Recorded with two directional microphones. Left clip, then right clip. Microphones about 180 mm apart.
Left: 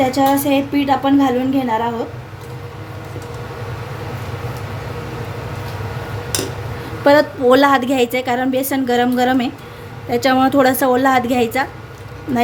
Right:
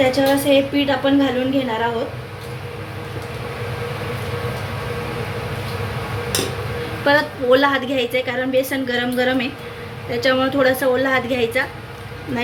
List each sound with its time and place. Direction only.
0.1 s a woman's voice: 65° left (ahead or behind)
7.0 s a woman's voice: 65° left (ahead or behind)